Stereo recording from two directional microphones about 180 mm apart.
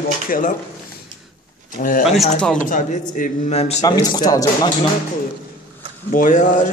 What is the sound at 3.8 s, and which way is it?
Speech, 20° left (ahead or behind).